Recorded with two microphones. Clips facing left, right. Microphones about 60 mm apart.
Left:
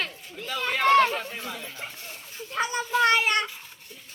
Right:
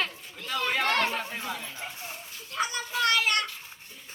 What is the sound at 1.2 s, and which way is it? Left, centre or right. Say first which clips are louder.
Chatter: even; centre.